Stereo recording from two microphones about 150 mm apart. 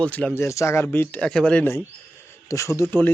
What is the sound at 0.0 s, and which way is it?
A man's voice, 10° left (ahead or behind).